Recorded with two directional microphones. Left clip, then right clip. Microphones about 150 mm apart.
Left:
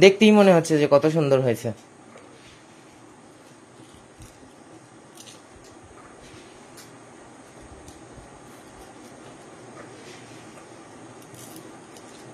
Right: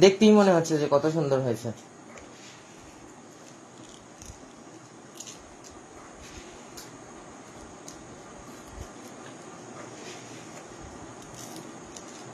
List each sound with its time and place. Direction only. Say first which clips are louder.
0.0 s speech: left 4 dB; 45° left (ahead or behind)